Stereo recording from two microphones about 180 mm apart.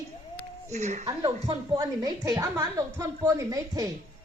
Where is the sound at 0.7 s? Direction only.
40° right (ahead or behind).